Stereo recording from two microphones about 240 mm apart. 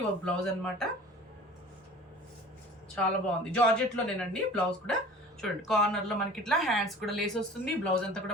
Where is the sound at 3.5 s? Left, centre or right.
Centre.